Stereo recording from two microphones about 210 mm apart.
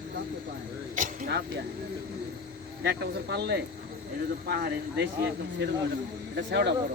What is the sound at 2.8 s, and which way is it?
Speech, 55° right (ahead or behind).